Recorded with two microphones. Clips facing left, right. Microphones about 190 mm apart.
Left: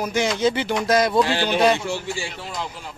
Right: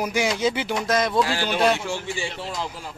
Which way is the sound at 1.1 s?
20° left (ahead or behind).